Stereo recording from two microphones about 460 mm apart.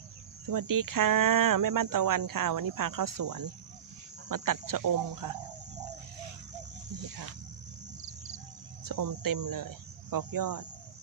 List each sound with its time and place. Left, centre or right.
0.4 s speech: right
8.8 s speech: right